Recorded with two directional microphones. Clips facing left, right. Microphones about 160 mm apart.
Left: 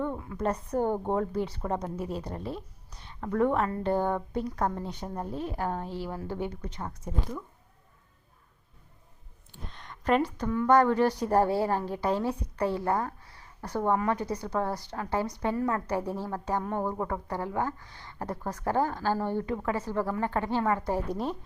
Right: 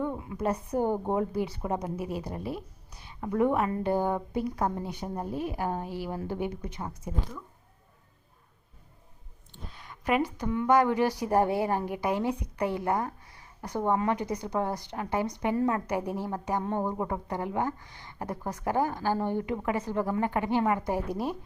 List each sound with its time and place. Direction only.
0.2 s speech: 15° right (ahead or behind)
9.6 s speech: 10° right (ahead or behind)